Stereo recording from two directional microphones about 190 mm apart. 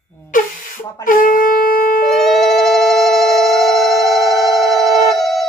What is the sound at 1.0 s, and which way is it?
Wind instrument, 45° left (ahead or behind).